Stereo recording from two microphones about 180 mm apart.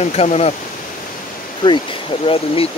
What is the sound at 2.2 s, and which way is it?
Speech, 30° left (ahead or behind).